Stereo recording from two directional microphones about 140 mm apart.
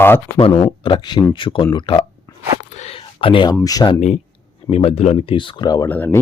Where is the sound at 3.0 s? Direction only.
40° left (ahead or behind).